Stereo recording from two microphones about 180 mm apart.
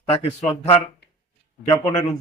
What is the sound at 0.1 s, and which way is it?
A man's voice, 35° left (ahead or behind).